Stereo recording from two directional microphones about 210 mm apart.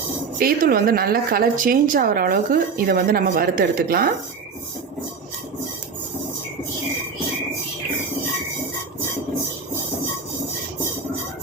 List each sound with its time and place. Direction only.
0.3 s a woman's voice: 45° right (ahead or behind)